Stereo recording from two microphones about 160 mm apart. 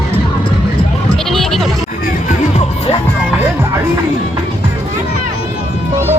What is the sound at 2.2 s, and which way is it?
Music, 45° left (ahead or behind).